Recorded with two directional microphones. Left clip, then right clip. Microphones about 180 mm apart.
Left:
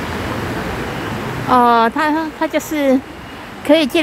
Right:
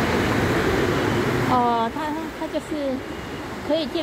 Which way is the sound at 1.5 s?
50° left (ahead or behind).